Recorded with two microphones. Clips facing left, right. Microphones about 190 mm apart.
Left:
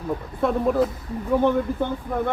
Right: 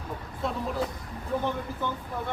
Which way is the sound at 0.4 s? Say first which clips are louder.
Left 10 dB; 55° left (ahead or behind).